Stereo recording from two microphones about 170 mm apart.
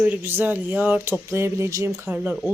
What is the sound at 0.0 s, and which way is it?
Speech, 10° right (ahead or behind).